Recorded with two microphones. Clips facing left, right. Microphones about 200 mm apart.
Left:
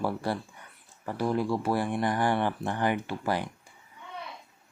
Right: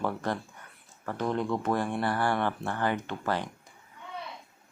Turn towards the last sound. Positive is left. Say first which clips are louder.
# left 1 dB
turn(degrees=10)  # may be behind; listen again after turning